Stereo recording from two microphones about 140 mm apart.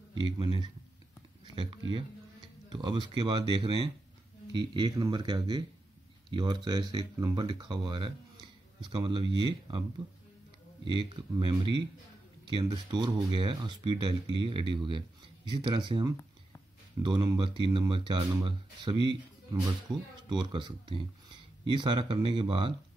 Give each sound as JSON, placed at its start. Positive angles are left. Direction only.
{"t": 0.4, "sound": "speech", "side_deg": -35}
{"t": 1.4, "sound": "a sound", "side_deg": -35}
{"t": 2.7, "sound": "speech", "side_deg": -35}
{"t": 10.9, "sound": "speech", "side_deg": -35}
{"t": 20.2, "sound": "speech", "side_deg": -35}